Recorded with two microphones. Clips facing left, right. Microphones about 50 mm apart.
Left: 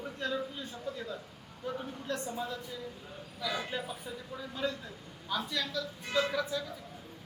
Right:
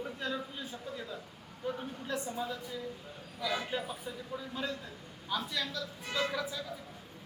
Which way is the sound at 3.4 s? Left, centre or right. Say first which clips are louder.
Right 1 dB; centre.